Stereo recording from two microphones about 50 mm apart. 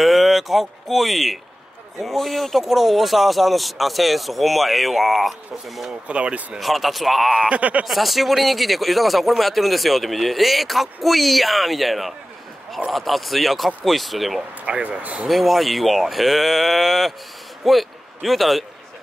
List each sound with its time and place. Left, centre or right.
0.0 s speech: centre
6.0 s speech: right
6.6 s speech: centre
7.4 s speech: right
7.8 s speech: centre
14.7 s speech: right
15.2 s speech: centre